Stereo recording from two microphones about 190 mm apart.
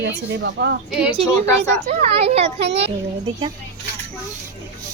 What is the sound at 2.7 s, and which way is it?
Speech, 65° right (ahead or behind).